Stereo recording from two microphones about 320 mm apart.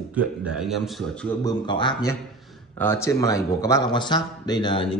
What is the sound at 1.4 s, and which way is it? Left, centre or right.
A man's voice, centre.